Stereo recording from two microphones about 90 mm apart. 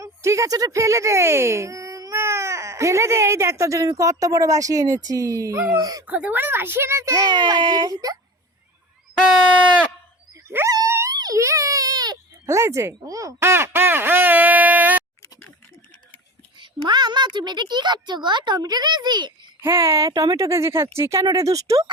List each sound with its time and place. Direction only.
0.0 s speech: 35° right (ahead or behind)
6.1 s a woman's voice: 15° right (ahead or behind); by 7.3 s 35° right (ahead or behind)
7.3 s speech: 55° right (ahead or behind)
10.7 s a sound: 40° right (ahead or behind)
11.3 s baby cry: 35° right (ahead or behind)
12.5 s speech: 35° right (ahead or behind)
16.6 s a child's voice: 55° right (ahead or behind)
19.6 s speech: 30° right (ahead or behind)